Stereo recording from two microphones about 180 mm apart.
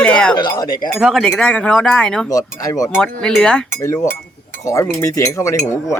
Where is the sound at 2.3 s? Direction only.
20° left (ahead or behind).